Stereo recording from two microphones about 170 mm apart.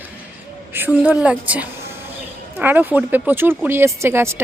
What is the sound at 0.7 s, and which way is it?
A woman's voice, 10° right (ahead or behind).